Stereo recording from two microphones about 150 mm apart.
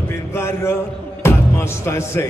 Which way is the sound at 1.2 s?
20° left (ahead or behind).